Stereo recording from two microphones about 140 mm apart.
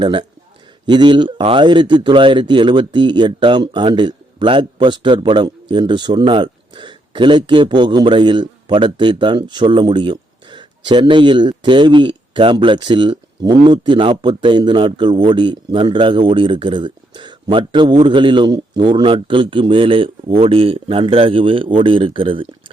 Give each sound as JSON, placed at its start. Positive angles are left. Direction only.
{"t": 0.0, "sound": "a man's voice", "side_deg": -35}